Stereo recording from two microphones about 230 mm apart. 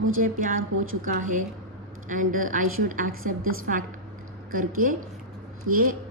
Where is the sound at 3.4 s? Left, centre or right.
Right.